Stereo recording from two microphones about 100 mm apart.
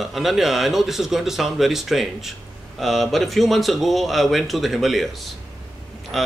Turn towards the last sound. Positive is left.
turn(degrees=0)  # may be behind; listen again after turning